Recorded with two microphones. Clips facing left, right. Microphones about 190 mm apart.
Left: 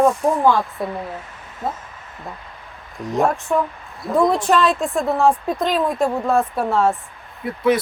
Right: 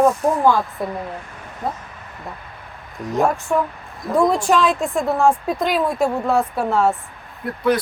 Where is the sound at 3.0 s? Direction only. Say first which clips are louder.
Even; centre (ahead or behind).